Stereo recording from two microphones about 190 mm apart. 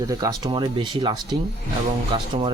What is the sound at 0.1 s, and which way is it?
Speech, 20° right (ahead or behind).